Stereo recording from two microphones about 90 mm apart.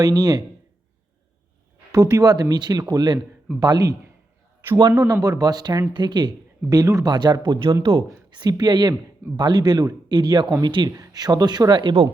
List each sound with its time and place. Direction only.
0.0 s speech: 45° right (ahead or behind)
1.9 s speech: 45° right (ahead or behind)
6.7 s speech: 40° right (ahead or behind)
7.0 s speech: 55° right (ahead or behind); by 8.0 s 75° right (ahead or behind)
8.3 s speech: 50° right (ahead or behind)
10.8 s speech: 40° right (ahead or behind)